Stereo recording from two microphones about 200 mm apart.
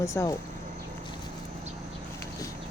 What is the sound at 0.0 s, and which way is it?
Speech, 15° left (ahead or behind).